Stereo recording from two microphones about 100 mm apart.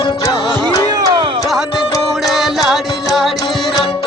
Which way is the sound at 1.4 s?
Centre (ahead or behind).